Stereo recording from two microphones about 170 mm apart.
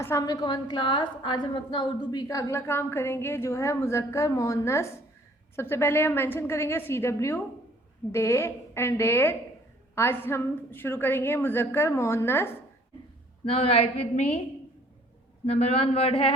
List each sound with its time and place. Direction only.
0.0 s a woman's voice: 15° left (ahead or behind)
13.4 s a woman's voice: 35° left (ahead or behind)
15.4 s a woman's voice: 40° left (ahead or behind)